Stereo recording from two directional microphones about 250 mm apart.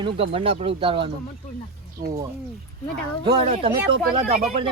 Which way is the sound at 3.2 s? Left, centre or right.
Centre.